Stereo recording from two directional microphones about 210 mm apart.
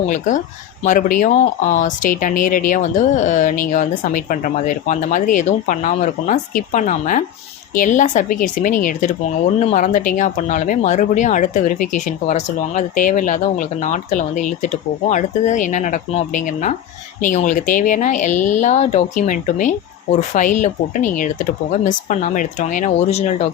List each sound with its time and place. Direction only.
0.1 s speech: 35° left (ahead or behind)